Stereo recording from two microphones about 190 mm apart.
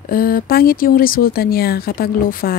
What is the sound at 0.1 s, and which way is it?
Speech, 50° left (ahead or behind).